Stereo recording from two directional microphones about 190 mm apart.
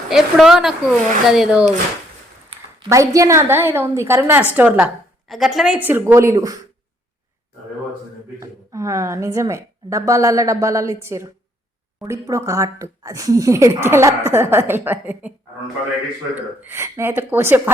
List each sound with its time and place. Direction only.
0.1 s a woman's voice: centre (ahead or behind)
2.9 s a woman's voice: 15° right (ahead or behind)
8.4 s a woman's voice: 15° right (ahead or behind)